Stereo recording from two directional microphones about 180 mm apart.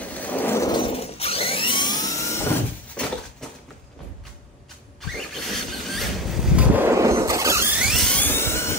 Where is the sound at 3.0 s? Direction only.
5° left (ahead or behind).